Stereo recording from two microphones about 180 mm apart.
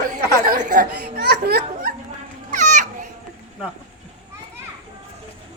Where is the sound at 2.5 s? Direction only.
45° right (ahead or behind).